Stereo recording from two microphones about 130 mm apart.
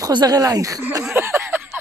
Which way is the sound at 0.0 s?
30° right (ahead or behind).